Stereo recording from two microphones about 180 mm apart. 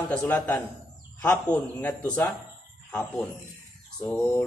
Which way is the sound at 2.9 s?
10° left (ahead or behind).